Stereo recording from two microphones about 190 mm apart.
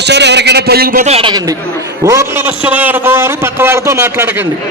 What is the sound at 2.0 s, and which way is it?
A man's voice, 15° right (ahead or behind).